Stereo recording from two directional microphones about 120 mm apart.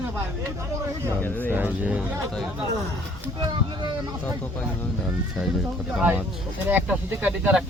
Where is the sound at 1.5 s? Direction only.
10° right (ahead or behind).